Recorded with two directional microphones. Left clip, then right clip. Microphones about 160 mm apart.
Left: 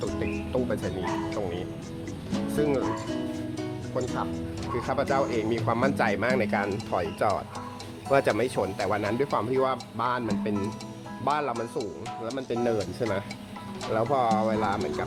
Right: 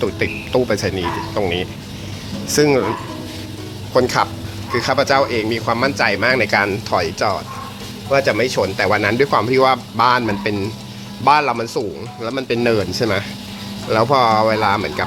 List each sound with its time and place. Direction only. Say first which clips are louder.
0.0 s speech: right 10 dB; 15° right (ahead or behind)
3.9 s speech: right 16 dB; 25° right (ahead or behind)
4.7 s speech: right 11 dB; 5° left (ahead or behind)
5.5 s speech: right 8 dB; 15° left (ahead or behind); by 15.0 s 5° right (ahead or behind)